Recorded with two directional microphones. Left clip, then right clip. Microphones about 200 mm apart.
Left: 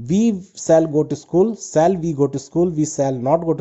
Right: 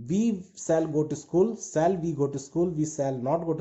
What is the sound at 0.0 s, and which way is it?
Speech, 40° left (ahead or behind).